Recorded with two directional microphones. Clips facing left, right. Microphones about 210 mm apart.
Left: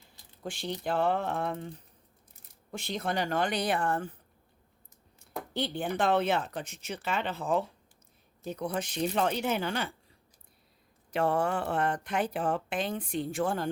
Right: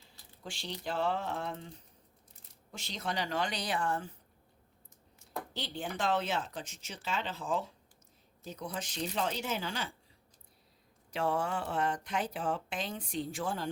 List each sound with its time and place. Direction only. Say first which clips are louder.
0.4 s speech: left 6 dB; 55° left (ahead or behind)
2.7 s speech: left 5 dB; 55° left (ahead or behind)
5.2 s speech: left 7 dB; 55° left (ahead or behind)
11.1 s speech: left 5 dB; 60° left (ahead or behind)